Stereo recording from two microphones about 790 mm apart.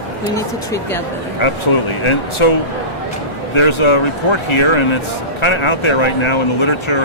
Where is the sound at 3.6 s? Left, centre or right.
Left.